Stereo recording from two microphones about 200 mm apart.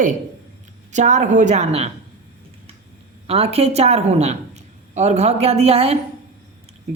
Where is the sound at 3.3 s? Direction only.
30° right (ahead or behind).